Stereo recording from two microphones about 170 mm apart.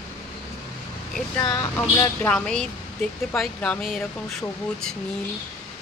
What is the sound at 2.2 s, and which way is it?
Speech, 5° left (ahead or behind).